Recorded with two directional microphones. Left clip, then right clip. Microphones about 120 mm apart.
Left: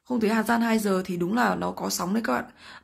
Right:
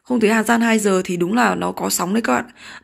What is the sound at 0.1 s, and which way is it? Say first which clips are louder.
Speech: right 8 dB; 15° right (ahead or behind).